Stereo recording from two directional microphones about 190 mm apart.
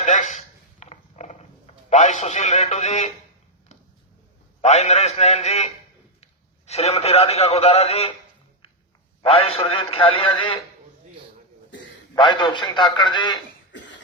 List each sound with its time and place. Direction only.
0.0 s a sound: 40° left (ahead or behind)
4.6 s a man's voice: 35° left (ahead or behind)
9.2 s a man's voice: 30° left (ahead or behind)
12.1 s a man's voice: 25° left (ahead or behind)